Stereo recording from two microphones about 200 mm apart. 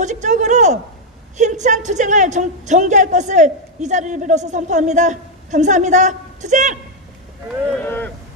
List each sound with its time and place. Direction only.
0.0 s a sound: 35° right (ahead or behind)
1.4 s a woman's voice: 35° right (ahead or behind)
7.8 s speech: 10° left (ahead or behind)